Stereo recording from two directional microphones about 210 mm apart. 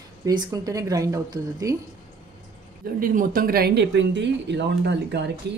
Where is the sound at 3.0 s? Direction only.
40° right (ahead or behind).